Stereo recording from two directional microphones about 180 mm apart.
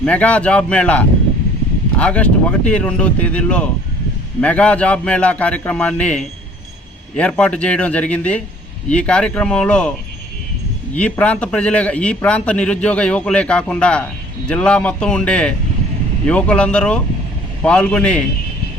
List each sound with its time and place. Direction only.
0.0 s a man's voice: 5° left (ahead or behind)
10.9 s a man's voice: 5° left (ahead or behind)